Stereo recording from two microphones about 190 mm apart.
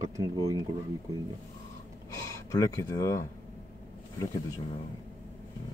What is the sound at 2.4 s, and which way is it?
Speech, 15° left (ahead or behind).